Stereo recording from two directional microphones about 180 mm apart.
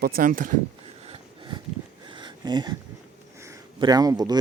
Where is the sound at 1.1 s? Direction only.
30° right (ahead or behind).